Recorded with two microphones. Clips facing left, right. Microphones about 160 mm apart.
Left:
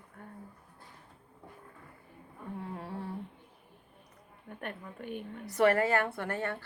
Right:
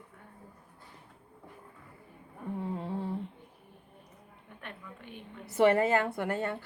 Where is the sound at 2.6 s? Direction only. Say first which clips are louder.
Right 6 dB; 20° right (ahead or behind).